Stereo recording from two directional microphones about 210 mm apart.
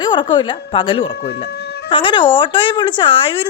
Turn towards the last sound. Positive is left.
turn(degrees=25)  # may be behind; listen again after turning